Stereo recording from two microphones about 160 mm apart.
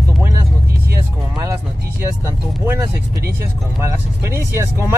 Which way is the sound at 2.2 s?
15° right (ahead or behind).